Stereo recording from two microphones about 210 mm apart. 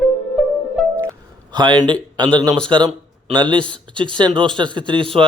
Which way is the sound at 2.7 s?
20° right (ahead or behind).